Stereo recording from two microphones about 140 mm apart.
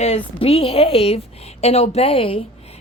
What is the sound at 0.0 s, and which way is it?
Speech, 45° left (ahead or behind).